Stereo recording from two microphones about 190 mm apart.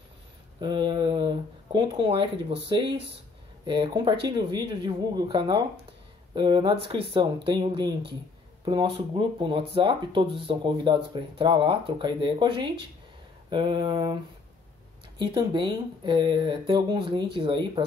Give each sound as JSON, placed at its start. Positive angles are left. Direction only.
{"t": 0.6, "sound": "speech", "side_deg": -25}
{"t": 15.1, "sound": "speech", "side_deg": -25}